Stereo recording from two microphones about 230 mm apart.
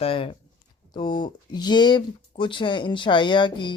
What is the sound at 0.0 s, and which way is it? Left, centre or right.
Speech, left.